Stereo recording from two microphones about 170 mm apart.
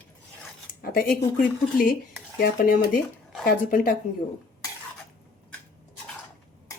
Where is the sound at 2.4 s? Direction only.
60° left (ahead or behind).